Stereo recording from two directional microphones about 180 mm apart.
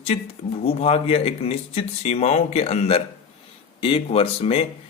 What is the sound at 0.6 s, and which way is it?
Speech, 35° left (ahead or behind).